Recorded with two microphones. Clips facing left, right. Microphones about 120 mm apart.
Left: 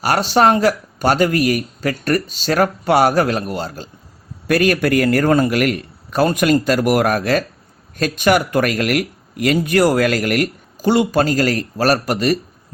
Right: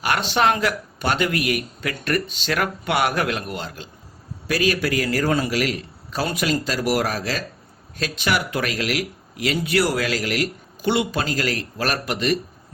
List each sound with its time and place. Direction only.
0.0 s speech: 40° left (ahead or behind)
4.4 s speech: 55° left (ahead or behind)